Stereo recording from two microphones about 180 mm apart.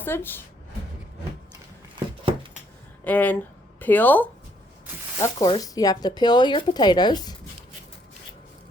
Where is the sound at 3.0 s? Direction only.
10° left (ahead or behind).